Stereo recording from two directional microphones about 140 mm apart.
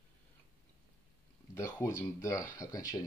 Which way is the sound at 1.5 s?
20° left (ahead or behind).